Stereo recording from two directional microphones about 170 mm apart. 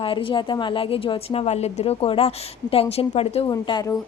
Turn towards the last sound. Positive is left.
turn(degrees=20)  # may be behind; listen again after turning